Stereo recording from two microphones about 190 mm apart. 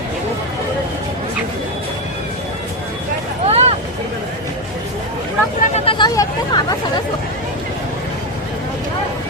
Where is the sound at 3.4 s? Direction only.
35° right (ahead or behind).